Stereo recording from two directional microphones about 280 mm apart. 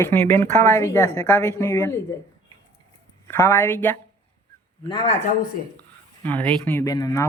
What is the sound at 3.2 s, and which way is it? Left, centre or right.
Speech, centre.